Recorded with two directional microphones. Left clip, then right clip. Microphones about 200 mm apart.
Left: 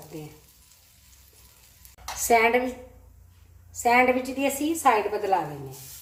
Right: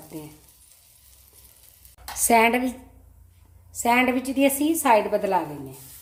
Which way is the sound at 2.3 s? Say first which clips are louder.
Right 1 dB; 45° right (ahead or behind).